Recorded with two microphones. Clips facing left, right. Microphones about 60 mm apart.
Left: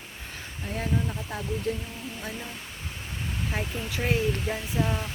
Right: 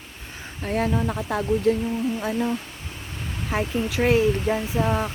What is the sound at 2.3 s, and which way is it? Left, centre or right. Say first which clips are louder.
Speech: right 13 dB; right.